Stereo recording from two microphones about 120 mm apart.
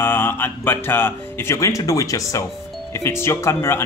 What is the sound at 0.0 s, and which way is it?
Speech, 20° left (ahead or behind).